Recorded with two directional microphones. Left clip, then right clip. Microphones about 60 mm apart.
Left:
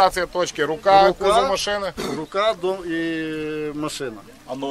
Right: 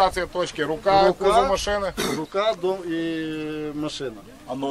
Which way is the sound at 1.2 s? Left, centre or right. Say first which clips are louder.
Left 1 dB; left.